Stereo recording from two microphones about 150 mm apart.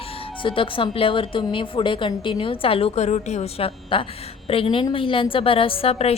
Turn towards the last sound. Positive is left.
turn(degrees=40)  # may be behind; listen again after turning